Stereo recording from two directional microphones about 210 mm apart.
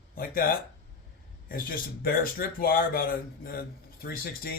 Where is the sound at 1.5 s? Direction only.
45° left (ahead or behind).